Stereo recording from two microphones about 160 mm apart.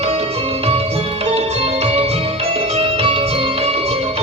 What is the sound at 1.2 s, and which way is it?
Music, 40° right (ahead or behind).